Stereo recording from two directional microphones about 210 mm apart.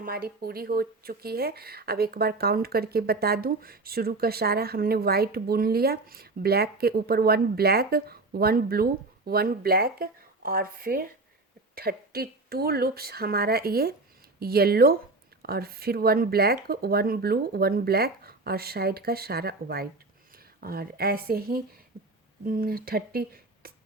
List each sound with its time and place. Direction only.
0.0 s speech: 45° right (ahead or behind)